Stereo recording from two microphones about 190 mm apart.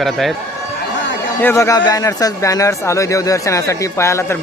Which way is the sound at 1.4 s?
15° left (ahead or behind).